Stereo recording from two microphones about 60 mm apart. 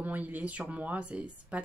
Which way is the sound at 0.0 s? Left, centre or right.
Right.